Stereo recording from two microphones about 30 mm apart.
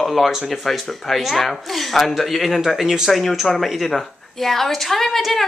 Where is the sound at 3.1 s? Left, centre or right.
Centre.